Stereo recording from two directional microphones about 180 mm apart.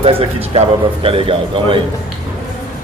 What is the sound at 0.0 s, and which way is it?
Speech, 30° right (ahead or behind).